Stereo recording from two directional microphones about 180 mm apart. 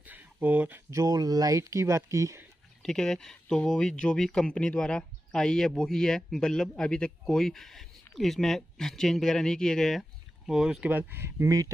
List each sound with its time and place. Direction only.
0.0 s speech: 10° right (ahead or behind)
2.8 s speech: 5° left (ahead or behind); by 11.7 s 20° right (ahead or behind)